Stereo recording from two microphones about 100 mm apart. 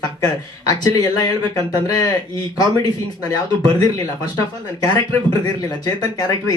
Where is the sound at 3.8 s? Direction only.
40° left (ahead or behind).